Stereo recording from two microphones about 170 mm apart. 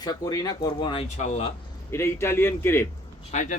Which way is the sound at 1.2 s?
40° left (ahead or behind).